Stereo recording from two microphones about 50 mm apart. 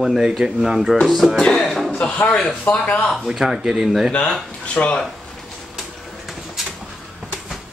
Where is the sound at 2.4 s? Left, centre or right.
Left.